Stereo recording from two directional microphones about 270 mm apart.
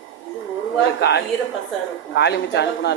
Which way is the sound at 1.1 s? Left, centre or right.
Left.